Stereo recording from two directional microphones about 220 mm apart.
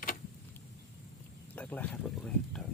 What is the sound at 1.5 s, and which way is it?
Speech, 5° left (ahead or behind).